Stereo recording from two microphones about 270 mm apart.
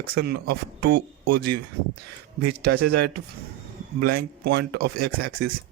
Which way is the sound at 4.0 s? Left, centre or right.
Right.